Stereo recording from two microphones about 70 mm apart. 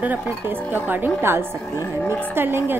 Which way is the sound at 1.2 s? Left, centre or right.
Right.